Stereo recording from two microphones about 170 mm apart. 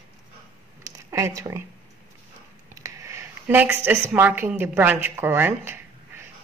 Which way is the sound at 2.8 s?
20° right (ahead or behind).